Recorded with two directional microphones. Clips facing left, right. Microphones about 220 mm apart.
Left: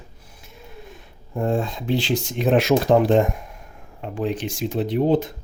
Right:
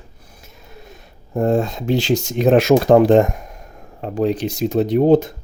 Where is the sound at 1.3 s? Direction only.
40° right (ahead or behind).